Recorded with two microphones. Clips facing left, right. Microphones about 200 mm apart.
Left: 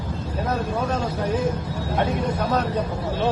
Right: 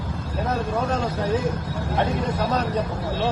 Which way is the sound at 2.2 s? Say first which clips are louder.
Left 1 dB; 10° left (ahead or behind).